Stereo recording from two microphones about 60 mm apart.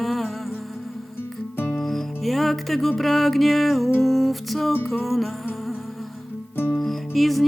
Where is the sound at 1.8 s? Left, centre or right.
Centre.